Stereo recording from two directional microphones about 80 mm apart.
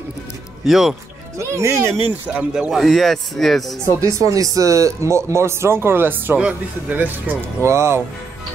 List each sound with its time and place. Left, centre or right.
0.7 s speech: centre
1.4 s speech: right
2.2 s speech: centre
2.7 s speech: centre
4.0 s speech: right; by 7.3 s centre
7.6 s speech: right